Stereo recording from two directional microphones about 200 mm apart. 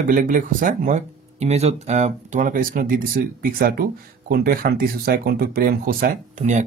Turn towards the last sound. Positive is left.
turn(degrees=-35)  # may be behind; listen again after turning